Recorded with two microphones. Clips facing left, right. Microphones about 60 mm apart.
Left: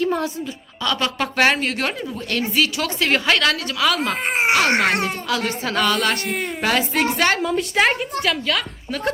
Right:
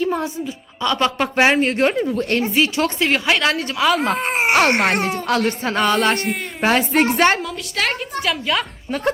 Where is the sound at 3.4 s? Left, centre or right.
Right.